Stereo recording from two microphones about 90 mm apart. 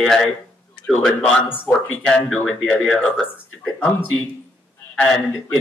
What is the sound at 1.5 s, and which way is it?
A man's voice, 20° left (ahead or behind).